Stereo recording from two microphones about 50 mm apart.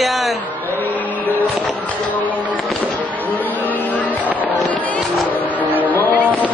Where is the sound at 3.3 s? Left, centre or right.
Left.